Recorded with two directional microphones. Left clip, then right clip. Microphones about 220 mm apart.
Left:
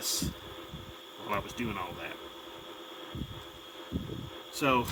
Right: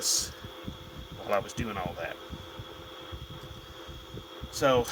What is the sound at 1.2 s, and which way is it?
Speech, 40° right (ahead or behind).